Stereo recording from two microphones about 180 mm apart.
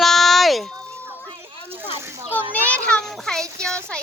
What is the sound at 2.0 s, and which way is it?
Children playing, 15° right (ahead or behind).